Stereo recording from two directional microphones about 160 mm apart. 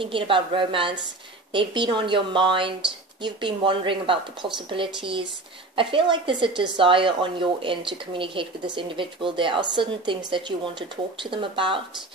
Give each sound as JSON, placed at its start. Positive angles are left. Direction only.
{"t": 0.0, "sound": "speech", "side_deg": -35}